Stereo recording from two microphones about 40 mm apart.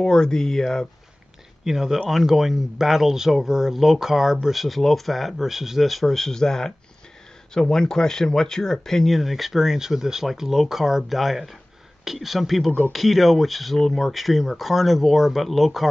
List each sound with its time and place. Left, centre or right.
0.0 s speech: centre
1.6 s speech: centre
7.7 s speech: centre